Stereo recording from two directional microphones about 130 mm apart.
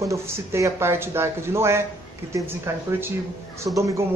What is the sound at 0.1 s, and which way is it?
Speech, 25° right (ahead or behind).